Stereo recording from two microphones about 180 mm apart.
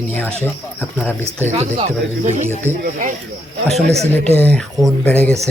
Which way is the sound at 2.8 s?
50° right (ahead or behind).